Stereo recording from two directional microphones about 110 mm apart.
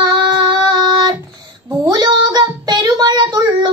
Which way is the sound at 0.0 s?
40° right (ahead or behind).